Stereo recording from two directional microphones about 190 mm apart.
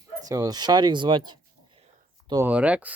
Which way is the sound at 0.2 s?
20° right (ahead or behind).